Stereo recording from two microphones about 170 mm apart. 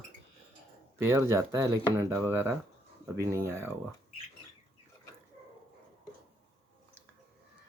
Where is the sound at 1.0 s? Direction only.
15° right (ahead or behind).